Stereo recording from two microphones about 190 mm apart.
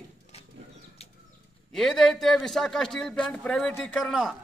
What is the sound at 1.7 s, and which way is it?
A man's voice, centre (ahead or behind).